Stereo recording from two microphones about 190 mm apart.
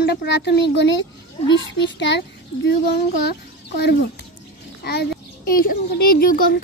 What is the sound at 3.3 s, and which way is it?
A child's voice, 60° left (ahead or behind).